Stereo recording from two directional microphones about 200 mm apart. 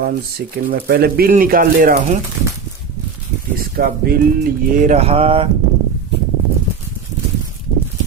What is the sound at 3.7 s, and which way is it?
Speech, 45° right (ahead or behind).